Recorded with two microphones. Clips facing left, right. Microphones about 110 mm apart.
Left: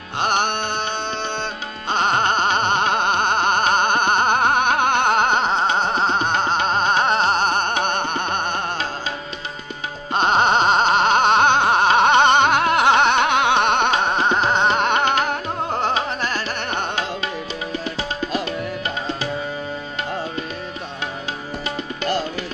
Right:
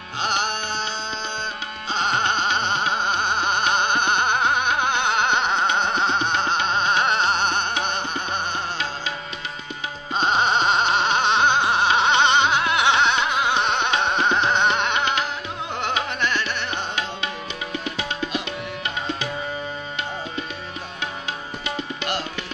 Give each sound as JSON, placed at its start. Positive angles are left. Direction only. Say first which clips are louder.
{"t": 0.2, "sound": "music", "louder": "left 4 dB", "side_deg": 55}
{"t": 10.1, "sound": "music", "louder": "left 4 dB", "side_deg": 50}
{"t": 17.9, "sound": "music", "louder": "left 3 dB", "side_deg": 40}